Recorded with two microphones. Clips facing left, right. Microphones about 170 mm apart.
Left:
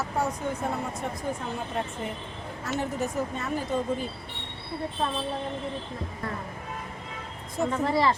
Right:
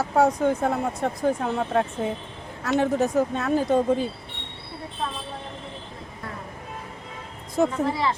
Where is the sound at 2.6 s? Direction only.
70° right (ahead or behind).